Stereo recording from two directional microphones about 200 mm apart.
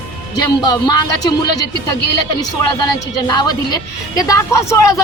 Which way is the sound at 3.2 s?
20° left (ahead or behind).